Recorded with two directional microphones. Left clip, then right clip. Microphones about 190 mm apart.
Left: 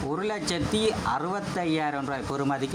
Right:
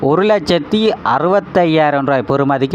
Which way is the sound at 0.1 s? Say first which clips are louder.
Right 17 dB; 40° right (ahead or behind).